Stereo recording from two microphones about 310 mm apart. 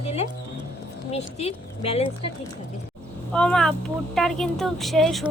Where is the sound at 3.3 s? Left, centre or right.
Centre.